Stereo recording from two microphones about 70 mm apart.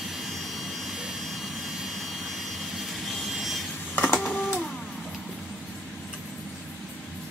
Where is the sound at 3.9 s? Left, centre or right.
Left.